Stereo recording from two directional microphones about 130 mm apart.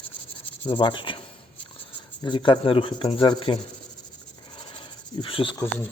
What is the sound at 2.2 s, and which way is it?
Speech, 40° left (ahead or behind).